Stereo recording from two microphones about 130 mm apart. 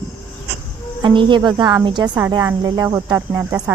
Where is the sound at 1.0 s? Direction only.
40° right (ahead or behind).